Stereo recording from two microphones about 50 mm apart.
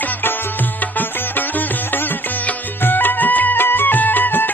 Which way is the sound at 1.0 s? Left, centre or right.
Left.